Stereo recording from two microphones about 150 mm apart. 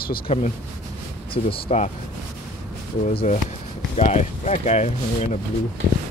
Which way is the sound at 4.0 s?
50° left (ahead or behind).